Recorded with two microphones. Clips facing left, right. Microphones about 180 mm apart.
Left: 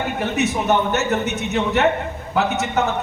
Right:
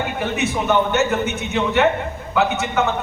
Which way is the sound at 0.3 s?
40° left (ahead or behind).